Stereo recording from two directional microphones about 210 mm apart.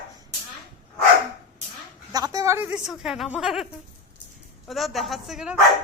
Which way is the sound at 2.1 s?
15° right (ahead or behind).